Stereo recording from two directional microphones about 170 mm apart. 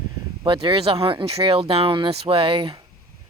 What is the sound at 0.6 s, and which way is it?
Speech, 35° right (ahead or behind).